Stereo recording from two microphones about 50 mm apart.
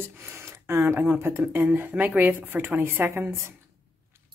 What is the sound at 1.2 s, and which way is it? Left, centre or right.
Speech, right.